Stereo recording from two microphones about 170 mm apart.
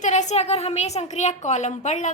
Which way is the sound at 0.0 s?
45° left (ahead or behind).